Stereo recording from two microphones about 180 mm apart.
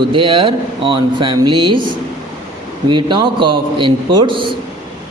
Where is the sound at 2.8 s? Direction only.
25° right (ahead or behind).